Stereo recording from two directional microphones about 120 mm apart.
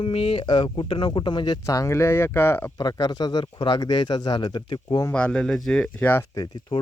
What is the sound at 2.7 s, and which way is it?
Speech, 35° left (ahead or behind).